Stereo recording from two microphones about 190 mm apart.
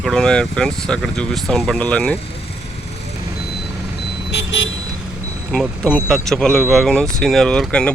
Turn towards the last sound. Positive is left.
turn(degrees=5)  # may be behind; listen again after turning